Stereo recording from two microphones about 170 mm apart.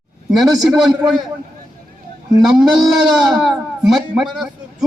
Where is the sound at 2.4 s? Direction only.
Centre (ahead or behind).